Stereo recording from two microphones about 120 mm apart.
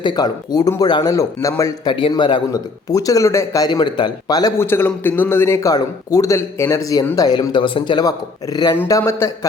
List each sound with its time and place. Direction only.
0.0 s a man's voice: 35° left (ahead or behind)
1.9 s a man's voice: 45° left (ahead or behind)
2.5 s speech: 30° left (ahead or behind)
4.5 s a man's voice: 20° left (ahead or behind); by 8.1 s 40° left (ahead or behind)
8.9 s a man's voice: 25° left (ahead or behind)